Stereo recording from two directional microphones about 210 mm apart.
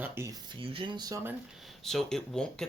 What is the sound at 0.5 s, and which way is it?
Speech, 25° right (ahead or behind).